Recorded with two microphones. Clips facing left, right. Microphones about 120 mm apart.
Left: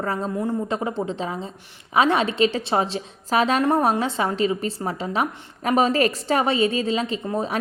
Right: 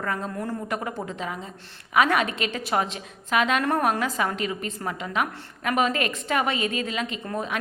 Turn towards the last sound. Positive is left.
turn(degrees=30)  # may be behind; listen again after turning